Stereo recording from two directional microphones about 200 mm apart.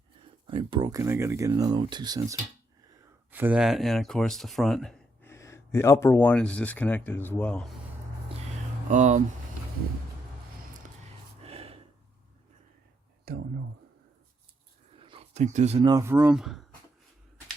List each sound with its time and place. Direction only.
0.4 s speech: 25° right (ahead or behind)
3.3 s speech: 10° right (ahead or behind)
8.9 s speech: 35° right (ahead or behind)
11.4 s gasp: 30° right (ahead or behind)
13.3 s a sound: 50° right (ahead or behind)
14.9 s a sound: 25° right (ahead or behind)
15.9 s speech: 15° right (ahead or behind)